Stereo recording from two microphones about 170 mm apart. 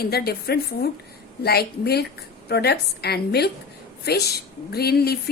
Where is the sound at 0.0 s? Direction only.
65° left (ahead or behind).